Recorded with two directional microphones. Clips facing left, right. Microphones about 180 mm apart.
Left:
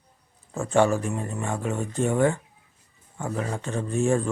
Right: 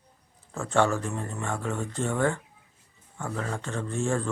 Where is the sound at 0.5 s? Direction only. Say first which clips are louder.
Left 3 dB; 15° left (ahead or behind).